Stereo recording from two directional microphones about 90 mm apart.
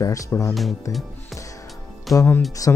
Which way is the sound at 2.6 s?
40° left (ahead or behind).